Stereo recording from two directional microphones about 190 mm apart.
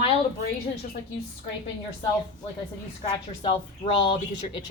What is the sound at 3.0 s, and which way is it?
Speech, 25° left (ahead or behind).